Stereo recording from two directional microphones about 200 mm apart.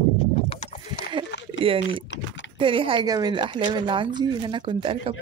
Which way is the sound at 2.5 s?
25° right (ahead or behind).